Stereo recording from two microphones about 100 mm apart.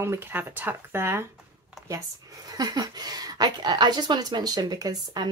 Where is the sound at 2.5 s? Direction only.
40° right (ahead or behind).